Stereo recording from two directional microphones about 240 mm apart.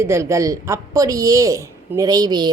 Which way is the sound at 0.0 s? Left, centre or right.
Centre.